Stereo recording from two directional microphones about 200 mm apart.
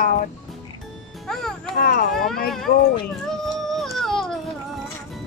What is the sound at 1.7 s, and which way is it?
Speech, 45° left (ahead or behind).